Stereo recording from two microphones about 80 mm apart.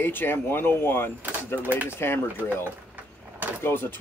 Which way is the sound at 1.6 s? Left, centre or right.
Right.